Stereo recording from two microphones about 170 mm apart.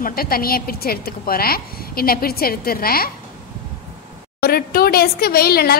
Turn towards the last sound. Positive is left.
turn(degrees=65)  # may be behind; listen again after turning